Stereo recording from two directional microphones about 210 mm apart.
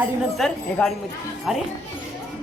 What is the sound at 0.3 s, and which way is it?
Speech, centre (ahead or behind).